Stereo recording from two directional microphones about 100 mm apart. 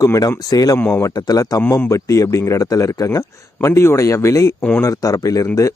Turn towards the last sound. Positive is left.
turn(degrees=35)  # may be behind; listen again after turning